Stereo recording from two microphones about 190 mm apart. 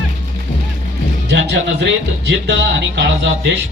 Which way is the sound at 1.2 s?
65° right (ahead or behind).